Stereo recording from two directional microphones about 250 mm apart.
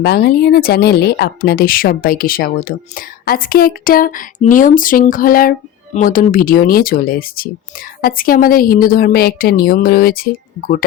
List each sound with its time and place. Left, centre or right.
0.0 s speech: left